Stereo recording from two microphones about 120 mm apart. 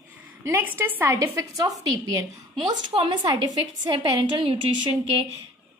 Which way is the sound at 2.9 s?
35° right (ahead or behind).